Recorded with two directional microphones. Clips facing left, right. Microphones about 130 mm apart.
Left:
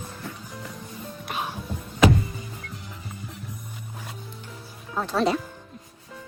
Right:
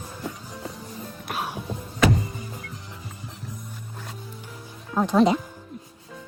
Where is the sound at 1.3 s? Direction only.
Centre (ahead or behind).